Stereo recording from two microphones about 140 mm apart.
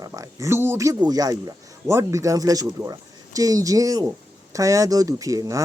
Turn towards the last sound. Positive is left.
turn(degrees=-25)  # may be behind; listen again after turning